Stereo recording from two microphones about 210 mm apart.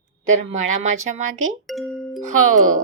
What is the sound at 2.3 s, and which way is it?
Speech, 85° right.